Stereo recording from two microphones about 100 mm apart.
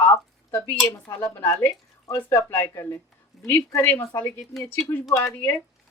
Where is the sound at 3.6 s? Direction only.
30° left (ahead or behind).